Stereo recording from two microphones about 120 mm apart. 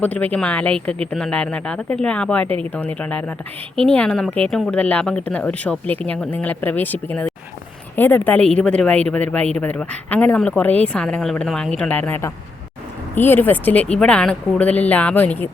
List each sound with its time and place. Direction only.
0.0 s speech: 15° left (ahead or behind)